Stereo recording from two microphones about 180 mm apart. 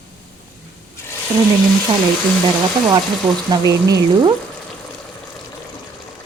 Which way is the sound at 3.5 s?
20° right (ahead or behind).